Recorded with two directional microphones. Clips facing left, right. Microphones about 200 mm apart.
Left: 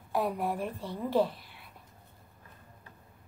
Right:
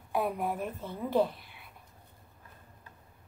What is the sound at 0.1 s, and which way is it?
Speech, centre (ahead or behind).